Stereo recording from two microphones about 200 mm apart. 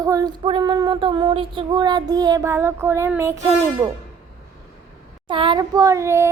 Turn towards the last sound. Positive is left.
turn(degrees=-15)  # may be behind; listen again after turning